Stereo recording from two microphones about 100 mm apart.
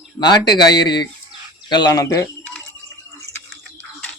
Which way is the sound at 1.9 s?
35° left (ahead or behind).